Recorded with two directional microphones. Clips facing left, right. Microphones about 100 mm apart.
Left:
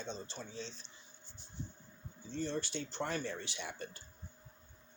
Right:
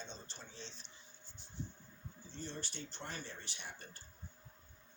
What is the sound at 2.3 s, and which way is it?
Speech, 85° left.